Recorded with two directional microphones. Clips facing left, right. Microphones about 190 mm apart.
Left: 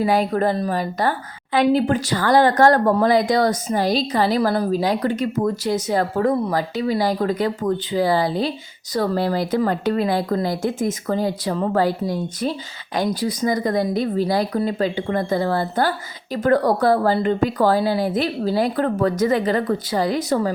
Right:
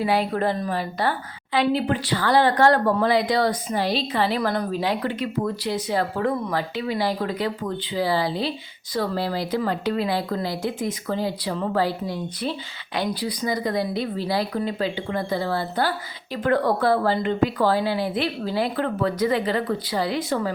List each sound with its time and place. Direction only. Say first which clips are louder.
0.0 s speech: left 4 dB; 45° left (ahead or behind)